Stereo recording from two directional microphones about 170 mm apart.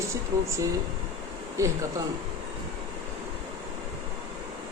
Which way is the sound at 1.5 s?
15° right (ahead or behind).